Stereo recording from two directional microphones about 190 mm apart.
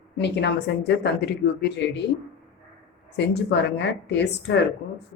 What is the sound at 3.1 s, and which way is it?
A woman's voice, 60° left (ahead or behind).